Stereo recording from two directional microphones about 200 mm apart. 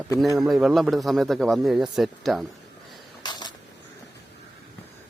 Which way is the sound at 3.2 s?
20° left (ahead or behind).